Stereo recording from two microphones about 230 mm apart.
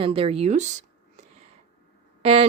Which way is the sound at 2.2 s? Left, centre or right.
Right.